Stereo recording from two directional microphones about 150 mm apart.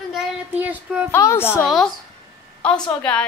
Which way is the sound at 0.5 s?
10° right (ahead or behind).